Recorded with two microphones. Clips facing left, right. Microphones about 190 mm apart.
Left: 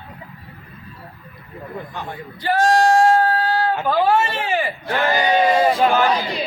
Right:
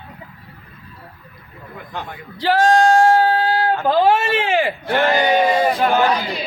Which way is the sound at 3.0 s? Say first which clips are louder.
Right 1 dB; 90° right.